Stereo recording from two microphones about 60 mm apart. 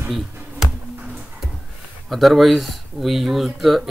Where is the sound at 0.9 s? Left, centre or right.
Right.